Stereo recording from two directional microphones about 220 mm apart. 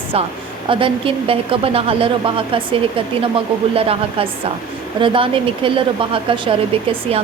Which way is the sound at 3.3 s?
25° right (ahead or behind).